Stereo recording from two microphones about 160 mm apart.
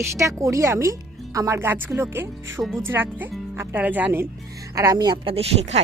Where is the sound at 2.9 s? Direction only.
10° right (ahead or behind).